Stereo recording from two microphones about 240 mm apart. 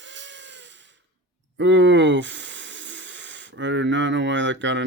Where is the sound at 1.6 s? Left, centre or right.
Right.